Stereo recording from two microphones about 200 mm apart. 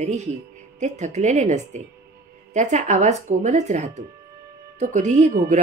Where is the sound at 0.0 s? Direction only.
35° right (ahead or behind).